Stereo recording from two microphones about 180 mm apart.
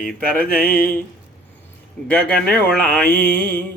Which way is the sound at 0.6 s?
55° left (ahead or behind).